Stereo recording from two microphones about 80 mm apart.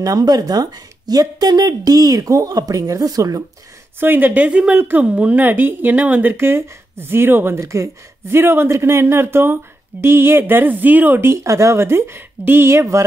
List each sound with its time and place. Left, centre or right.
0.0 s speech: right
4.0 s a woman's voice: right